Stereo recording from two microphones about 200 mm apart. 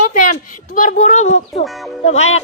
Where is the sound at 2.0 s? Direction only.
35° left (ahead or behind).